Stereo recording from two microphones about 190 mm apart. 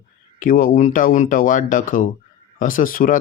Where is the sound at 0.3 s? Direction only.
45° left (ahead or behind).